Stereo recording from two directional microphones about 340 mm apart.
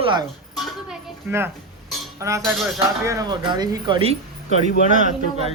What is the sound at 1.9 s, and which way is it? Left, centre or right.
Cutlery, centre.